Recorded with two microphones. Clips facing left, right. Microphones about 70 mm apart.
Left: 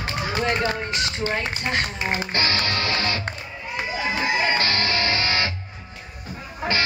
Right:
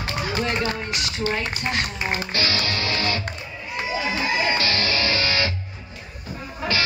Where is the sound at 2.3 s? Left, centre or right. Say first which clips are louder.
Left 1 dB; left.